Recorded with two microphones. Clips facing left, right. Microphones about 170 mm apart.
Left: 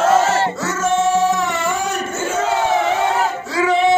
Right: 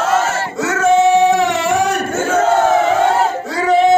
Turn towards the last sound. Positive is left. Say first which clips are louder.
# right 3 dB
turn(degrees=-40)  # may be behind; listen again after turning